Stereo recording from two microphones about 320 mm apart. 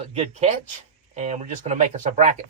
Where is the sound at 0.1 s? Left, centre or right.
Centre.